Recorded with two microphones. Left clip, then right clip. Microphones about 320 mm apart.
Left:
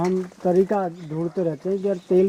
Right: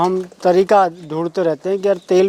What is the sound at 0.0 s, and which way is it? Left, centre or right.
Speech, right.